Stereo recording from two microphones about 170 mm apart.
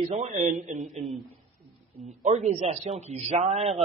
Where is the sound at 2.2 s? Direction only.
40° right (ahead or behind).